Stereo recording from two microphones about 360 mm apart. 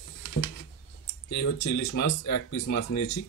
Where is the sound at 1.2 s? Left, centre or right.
Left.